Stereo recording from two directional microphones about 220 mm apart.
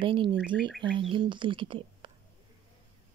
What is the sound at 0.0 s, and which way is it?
Speech, 20° right (ahead or behind).